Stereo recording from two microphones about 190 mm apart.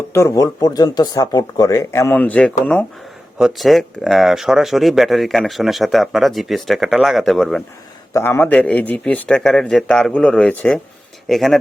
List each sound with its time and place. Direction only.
0.1 s speech: 15° left (ahead or behind)
8.1 s speech: 10° left (ahead or behind)